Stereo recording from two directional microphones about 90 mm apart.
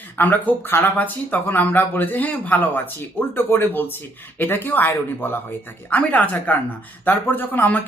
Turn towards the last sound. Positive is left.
turn(degrees=20)  # may be behind; listen again after turning